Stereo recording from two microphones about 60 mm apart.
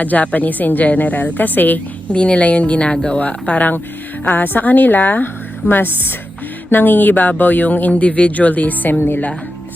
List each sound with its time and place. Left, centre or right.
0.0 s a woman's voice: left